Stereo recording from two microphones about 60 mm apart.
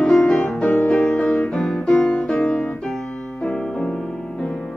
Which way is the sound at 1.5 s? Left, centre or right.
Centre.